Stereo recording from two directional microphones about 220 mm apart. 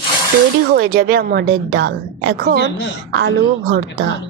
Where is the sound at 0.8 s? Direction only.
40° right (ahead or behind).